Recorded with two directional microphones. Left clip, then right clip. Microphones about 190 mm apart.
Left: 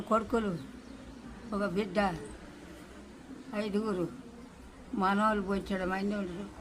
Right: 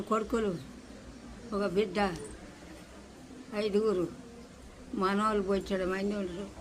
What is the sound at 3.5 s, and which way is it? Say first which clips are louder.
Speech: right 5 dB; 10° left (ahead or behind).